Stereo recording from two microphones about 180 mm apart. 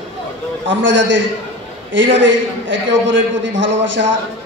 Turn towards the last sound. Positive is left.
turn(degrees=-90)